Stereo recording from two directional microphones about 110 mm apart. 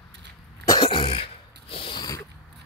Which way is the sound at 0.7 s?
40° left (ahead or behind).